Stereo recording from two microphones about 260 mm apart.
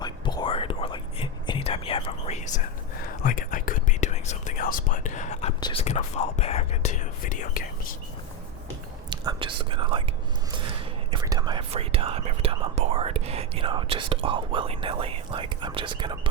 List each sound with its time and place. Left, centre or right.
0.0 s whispering: centre
9.0 s whispering: centre
11.1 s whispering: centre